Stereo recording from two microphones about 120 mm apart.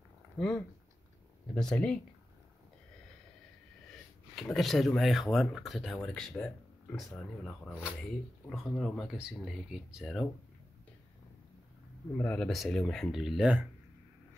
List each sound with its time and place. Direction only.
1.5 s speech: 5° left (ahead or behind)
4.4 s speech: centre (ahead or behind)
12.2 s speech: 5° left (ahead or behind)